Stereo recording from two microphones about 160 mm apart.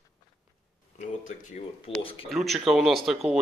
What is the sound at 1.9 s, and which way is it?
Speech, 35° left (ahead or behind).